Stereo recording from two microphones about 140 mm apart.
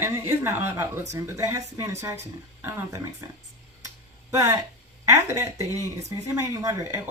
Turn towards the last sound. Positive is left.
turn(degrees=-20)  # may be behind; listen again after turning